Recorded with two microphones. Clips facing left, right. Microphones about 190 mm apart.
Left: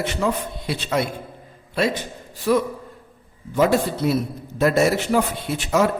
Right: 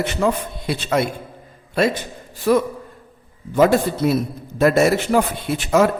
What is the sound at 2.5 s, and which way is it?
A man's voice, 55° right (ahead or behind).